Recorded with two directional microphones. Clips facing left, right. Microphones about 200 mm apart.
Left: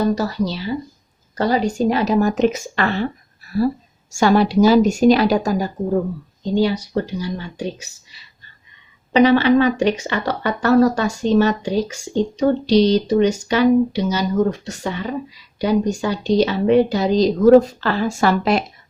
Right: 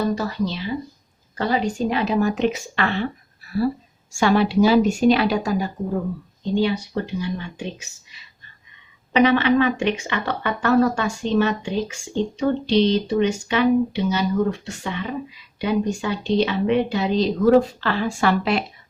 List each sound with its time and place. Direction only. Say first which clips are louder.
0.2 s speech: left 3 dB; 40° left (ahead or behind)